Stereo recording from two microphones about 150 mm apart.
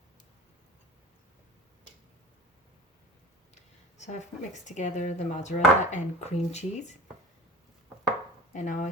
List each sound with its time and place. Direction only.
3.5 s speech: 50° left (ahead or behind)
8.5 s speech: 60° left (ahead or behind)